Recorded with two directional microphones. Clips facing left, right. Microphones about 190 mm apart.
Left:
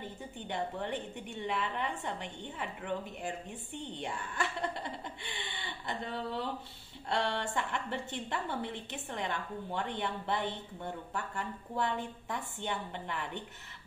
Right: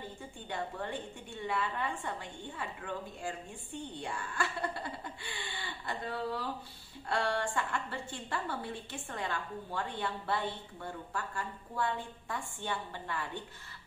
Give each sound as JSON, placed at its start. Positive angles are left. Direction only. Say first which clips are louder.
{"t": 0.5, "sound": "a woman's voice", "louder": "left 2 dB", "side_deg": 20}